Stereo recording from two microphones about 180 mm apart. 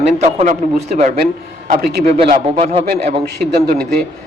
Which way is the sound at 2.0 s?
35° right (ahead or behind).